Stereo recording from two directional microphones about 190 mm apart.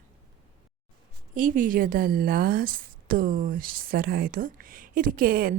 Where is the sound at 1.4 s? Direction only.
45° right (ahead or behind).